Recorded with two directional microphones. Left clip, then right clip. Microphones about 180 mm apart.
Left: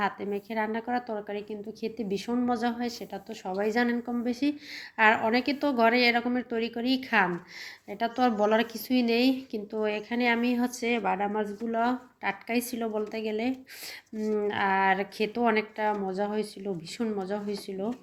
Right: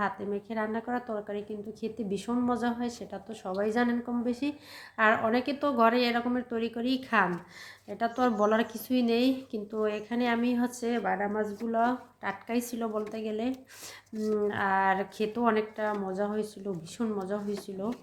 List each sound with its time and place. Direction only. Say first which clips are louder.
0.0 s a woman's voice: left 2 dB; 5° left (ahead or behind)
11.1 s speech: left 1 dB; 20° left (ahead or behind)
11.7 s speech: even; 5° left (ahead or behind)